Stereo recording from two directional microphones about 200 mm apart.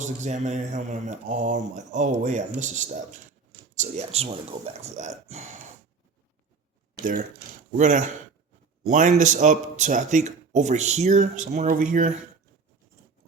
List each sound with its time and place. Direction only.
0.0 s speech: 35° right (ahead or behind)
7.0 s speech: 40° right (ahead or behind)